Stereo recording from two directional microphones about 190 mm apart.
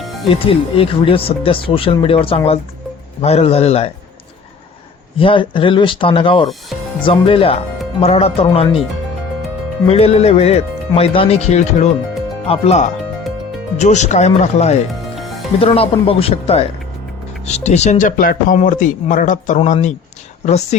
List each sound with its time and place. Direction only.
0.4 s speech: 30° left (ahead or behind)
5.1 s speech: 25° left (ahead or behind)
9.8 s speech: 30° left (ahead or behind)
15.1 s music: centre (ahead or behind)
15.6 s speech: 30° left (ahead or behind)